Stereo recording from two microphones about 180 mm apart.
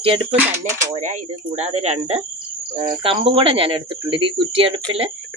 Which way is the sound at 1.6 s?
40° right (ahead or behind).